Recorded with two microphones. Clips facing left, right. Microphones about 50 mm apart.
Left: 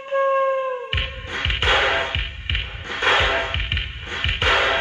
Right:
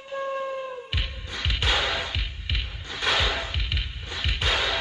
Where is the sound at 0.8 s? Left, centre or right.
Left.